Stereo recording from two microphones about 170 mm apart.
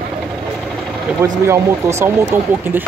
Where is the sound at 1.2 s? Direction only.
15° right (ahead or behind).